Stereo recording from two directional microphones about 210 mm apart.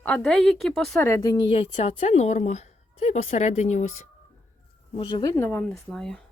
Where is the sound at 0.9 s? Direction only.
10° left (ahead or behind); by 4.1 s 35° left (ahead or behind).